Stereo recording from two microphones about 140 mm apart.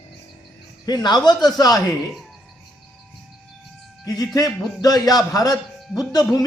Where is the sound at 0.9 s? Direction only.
30° left (ahead or behind).